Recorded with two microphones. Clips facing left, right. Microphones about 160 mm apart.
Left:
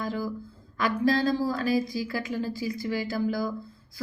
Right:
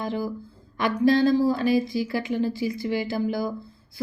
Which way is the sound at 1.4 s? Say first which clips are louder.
Right 5 dB; 25° right (ahead or behind).